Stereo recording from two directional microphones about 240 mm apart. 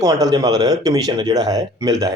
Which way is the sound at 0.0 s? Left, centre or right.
Centre.